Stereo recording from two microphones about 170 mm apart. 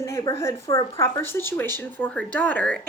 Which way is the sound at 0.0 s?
20° left (ahead or behind).